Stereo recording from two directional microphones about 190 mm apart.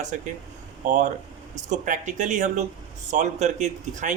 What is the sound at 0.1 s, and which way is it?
Speech, 40° right (ahead or behind).